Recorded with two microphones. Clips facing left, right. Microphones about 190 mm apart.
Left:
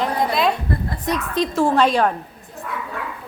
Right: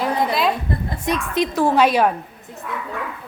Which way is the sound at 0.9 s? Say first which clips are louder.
Right 2 dB; 25° right (ahead or behind).